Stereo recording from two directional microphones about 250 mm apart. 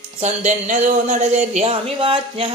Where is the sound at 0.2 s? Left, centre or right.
Right.